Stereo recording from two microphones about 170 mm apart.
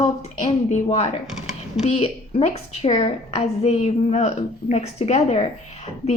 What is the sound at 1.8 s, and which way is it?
A woman's voice, 35° left (ahead or behind).